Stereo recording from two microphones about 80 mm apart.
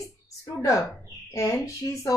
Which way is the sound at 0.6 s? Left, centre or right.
Left.